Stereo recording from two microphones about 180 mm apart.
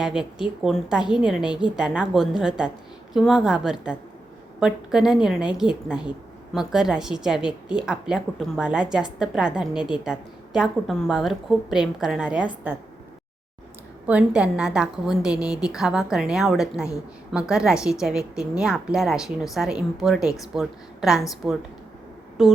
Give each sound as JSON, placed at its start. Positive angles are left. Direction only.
{"t": 0.0, "sound": "a woman's voice", "side_deg": -5}
{"t": 14.1, "sound": "a woman's voice", "side_deg": -5}
{"t": 20.1, "sound": "speech", "side_deg": 20}
{"t": 20.6, "sound": "a woman's voice", "side_deg": 0}